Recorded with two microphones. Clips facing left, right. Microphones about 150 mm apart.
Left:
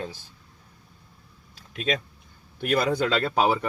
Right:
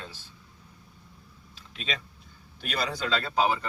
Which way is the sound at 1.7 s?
50° left (ahead or behind).